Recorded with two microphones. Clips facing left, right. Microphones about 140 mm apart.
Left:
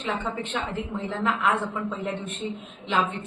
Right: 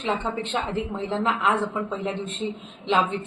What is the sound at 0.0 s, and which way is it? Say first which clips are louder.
A woman's voice: right 3 dB; 30° right (ahead or behind).